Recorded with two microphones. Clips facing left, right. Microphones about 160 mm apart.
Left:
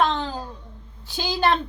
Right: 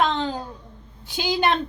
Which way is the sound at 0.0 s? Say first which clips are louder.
Even; 20° right (ahead or behind).